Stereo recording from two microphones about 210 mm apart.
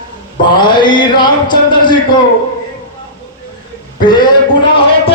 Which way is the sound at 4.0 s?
20° left (ahead or behind).